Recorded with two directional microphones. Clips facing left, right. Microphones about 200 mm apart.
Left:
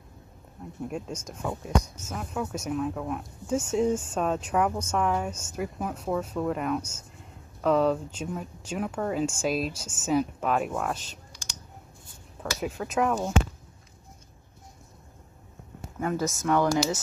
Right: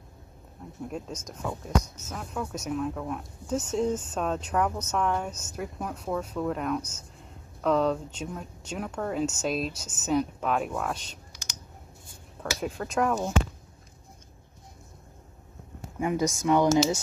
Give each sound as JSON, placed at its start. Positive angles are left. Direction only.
{"t": 0.8, "sound": "speech", "side_deg": 10}
{"t": 12.5, "sound": "speech", "side_deg": 5}
{"t": 16.0, "sound": "speech", "side_deg": -15}